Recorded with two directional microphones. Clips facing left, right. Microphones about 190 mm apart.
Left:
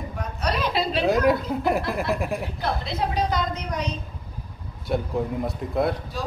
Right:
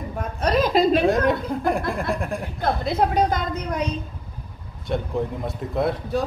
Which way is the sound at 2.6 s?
50° right (ahead or behind).